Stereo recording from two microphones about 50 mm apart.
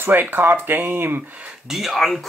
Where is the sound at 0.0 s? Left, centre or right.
Right.